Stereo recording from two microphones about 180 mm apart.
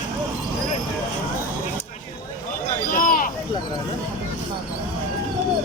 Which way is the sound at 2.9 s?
50° left (ahead or behind).